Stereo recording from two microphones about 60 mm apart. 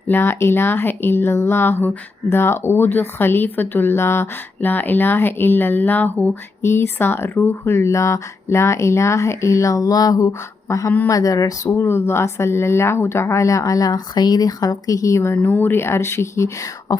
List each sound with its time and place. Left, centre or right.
0.1 s speech: left
4.6 s speech: left
6.6 s speech: left
11.1 s speech: left
11.7 s speech: left